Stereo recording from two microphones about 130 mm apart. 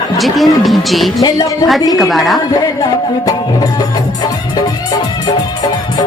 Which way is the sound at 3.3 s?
30° left (ahead or behind).